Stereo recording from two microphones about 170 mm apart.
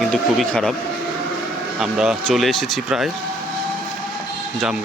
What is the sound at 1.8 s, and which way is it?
Speech, 5° right (ahead or behind).